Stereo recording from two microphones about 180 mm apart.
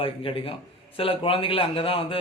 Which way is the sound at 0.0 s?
30° left (ahead or behind).